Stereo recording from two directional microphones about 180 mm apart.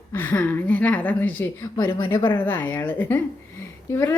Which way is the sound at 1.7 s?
25° left (ahead or behind).